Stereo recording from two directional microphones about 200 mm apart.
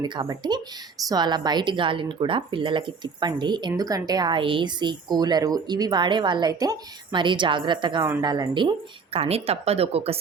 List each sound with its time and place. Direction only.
0.0 s a woman's voice: 20° right (ahead or behind)